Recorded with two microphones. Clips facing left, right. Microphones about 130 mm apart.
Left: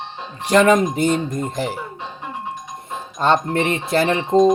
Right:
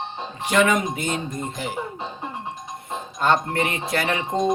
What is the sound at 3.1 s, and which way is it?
Speech, 25° left (ahead or behind).